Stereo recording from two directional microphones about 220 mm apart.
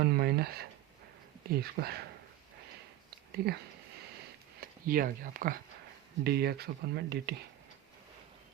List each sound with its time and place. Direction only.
0.0 s a sound: 45° right (ahead or behind)
1.5 s speech: 45° right (ahead or behind)
3.3 s speech: 45° right (ahead or behind)
4.6 s speech: 40° right (ahead or behind)